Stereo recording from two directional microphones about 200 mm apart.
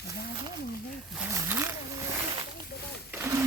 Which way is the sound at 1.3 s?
10° right (ahead or behind).